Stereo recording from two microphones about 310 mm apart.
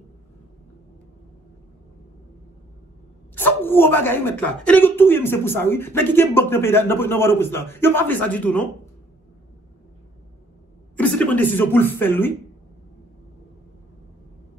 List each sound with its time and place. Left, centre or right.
3.3 s a woman's voice: centre
11.0 s speech: centre